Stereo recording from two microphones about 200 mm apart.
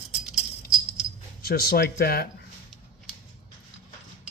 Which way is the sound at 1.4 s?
50° left (ahead or behind).